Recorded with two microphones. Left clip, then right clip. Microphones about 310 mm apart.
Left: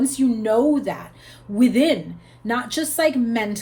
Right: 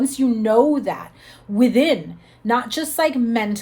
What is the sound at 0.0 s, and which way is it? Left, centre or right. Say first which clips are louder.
A woman's voice: right 1 dB; right.